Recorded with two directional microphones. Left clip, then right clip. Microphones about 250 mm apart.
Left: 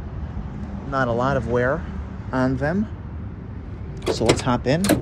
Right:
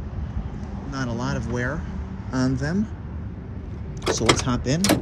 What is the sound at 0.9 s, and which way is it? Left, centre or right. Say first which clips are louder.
Speech: left 9 dB; centre.